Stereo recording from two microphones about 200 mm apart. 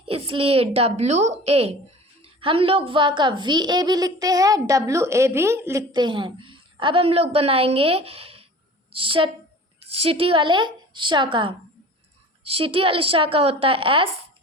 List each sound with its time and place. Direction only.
0.0 s a woman's voice: 30° right (ahead or behind)